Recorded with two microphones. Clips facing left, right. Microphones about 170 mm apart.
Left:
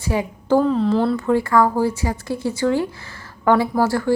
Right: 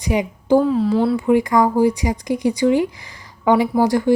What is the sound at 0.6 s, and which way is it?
Speech, 5° right (ahead or behind).